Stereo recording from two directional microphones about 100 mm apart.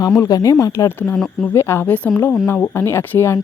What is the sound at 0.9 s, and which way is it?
Speech, 20° left (ahead or behind).